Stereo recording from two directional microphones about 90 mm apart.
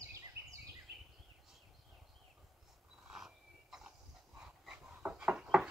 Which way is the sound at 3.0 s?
5° right (ahead or behind).